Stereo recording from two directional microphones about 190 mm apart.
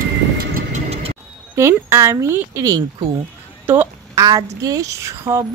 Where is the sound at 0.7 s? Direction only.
35° right (ahead or behind).